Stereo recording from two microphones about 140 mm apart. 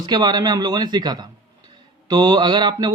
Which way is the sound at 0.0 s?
30° right (ahead or behind).